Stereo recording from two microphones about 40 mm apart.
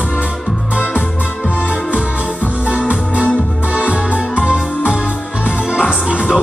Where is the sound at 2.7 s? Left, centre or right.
Right.